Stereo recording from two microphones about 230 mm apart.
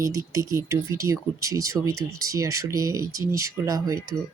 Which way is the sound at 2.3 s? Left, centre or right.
Centre.